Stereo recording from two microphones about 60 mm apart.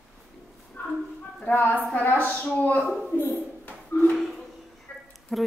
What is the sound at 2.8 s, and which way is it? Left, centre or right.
Speech, centre.